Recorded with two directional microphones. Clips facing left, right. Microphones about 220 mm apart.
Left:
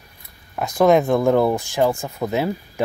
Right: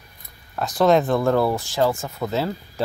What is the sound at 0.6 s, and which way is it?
Speech, 15° left (ahead or behind).